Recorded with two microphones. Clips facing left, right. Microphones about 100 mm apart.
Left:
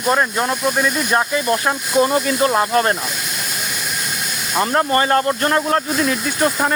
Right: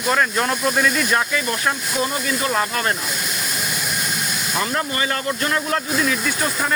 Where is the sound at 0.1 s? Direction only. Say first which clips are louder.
Left 2 dB; 20° left (ahead or behind).